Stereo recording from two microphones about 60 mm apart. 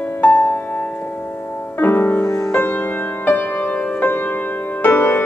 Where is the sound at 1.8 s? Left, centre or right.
Left.